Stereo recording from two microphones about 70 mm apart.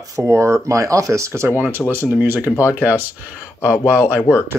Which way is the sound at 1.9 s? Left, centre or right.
Right.